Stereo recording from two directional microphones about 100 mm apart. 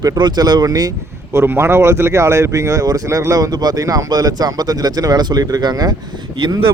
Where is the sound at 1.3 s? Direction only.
25° right (ahead or behind); by 5.9 s 45° right (ahead or behind).